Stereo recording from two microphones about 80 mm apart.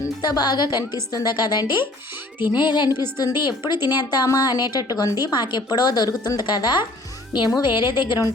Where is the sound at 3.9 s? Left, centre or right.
Left.